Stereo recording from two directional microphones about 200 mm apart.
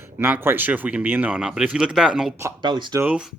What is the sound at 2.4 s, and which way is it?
Speech, 20° right (ahead or behind).